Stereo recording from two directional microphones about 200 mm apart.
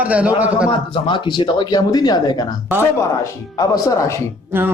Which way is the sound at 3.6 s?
15° left (ahead or behind).